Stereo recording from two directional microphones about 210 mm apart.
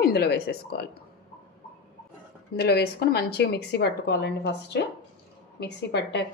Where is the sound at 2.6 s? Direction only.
50° left (ahead or behind).